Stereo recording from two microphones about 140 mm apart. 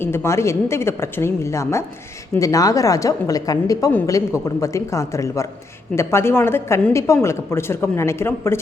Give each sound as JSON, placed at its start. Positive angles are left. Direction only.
{"t": 0.0, "sound": "a woman's voice", "side_deg": 15}